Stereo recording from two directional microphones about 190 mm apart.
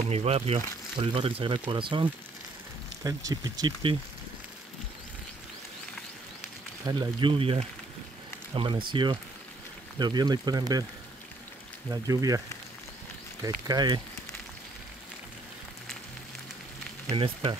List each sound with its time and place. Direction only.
0.0 s speech: 35° right (ahead or behind)
6.9 s speech: 25° right (ahead or behind)
11.9 s speech: 20° right (ahead or behind)
13.4 s speech: 20° right (ahead or behind)
17.1 s speech: 30° right (ahead or behind)